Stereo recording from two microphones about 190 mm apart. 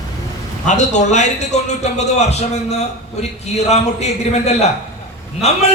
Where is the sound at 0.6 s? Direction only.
40° left (ahead or behind).